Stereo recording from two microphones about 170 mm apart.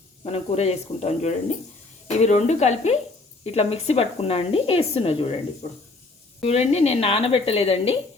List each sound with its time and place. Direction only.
0.3 s speech: 40° left (ahead or behind)
6.4 s speech: 40° left (ahead or behind)